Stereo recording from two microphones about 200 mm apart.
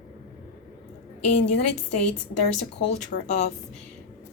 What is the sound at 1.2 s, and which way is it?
Speech, 35° left (ahead or behind).